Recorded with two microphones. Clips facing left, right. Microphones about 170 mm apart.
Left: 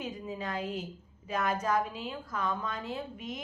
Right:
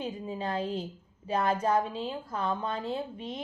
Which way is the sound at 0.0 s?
30° right (ahead or behind).